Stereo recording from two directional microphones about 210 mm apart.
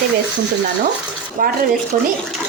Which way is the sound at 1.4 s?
40° right (ahead or behind).